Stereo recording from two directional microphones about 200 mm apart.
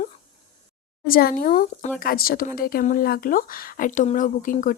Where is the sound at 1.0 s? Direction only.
45° left (ahead or behind).